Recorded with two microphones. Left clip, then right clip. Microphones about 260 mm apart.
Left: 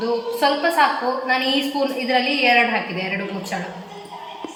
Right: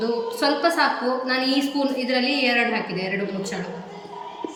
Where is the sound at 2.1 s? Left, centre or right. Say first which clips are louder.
Left 6 dB; centre.